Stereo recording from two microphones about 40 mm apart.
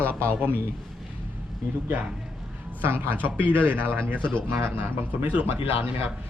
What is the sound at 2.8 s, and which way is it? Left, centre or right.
Speech, right.